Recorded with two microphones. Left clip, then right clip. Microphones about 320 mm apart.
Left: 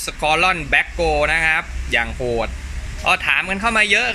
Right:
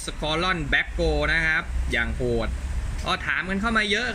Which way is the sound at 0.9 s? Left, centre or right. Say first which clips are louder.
Left 7 dB; left.